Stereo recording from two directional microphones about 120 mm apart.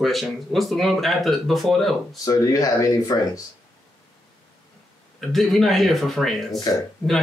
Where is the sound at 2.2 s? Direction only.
30° left (ahead or behind).